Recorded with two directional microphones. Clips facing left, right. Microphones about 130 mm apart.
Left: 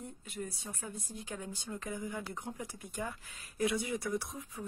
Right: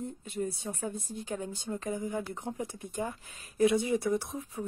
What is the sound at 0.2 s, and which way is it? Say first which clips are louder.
Speech: right 7 dB; 25° right (ahead or behind).